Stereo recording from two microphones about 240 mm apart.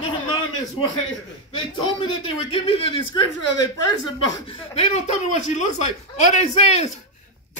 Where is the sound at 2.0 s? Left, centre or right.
Left.